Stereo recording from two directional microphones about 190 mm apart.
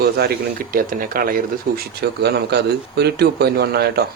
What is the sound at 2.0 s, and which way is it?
Speech, 60° right (ahead or behind).